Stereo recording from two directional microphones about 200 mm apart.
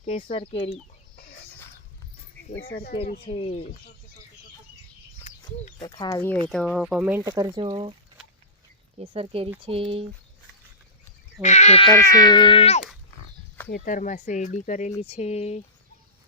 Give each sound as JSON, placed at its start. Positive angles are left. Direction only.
{"t": 0.0, "sound": "speech", "side_deg": 35}
{"t": 2.6, "sound": "speech", "side_deg": 50}
{"t": 3.3, "sound": "speech", "side_deg": 30}
{"t": 5.8, "sound": "speech", "side_deg": 20}
{"t": 6.5, "sound": "speech", "side_deg": 0}
{"t": 7.3, "sound": "speech", "side_deg": -15}
{"t": 9.0, "sound": "speech", "side_deg": -30}
{"t": 11.4, "sound": "speech", "side_deg": 35}
{"t": 11.9, "sound": "speech", "side_deg": 15}
{"t": 13.7, "sound": "speech", "side_deg": 45}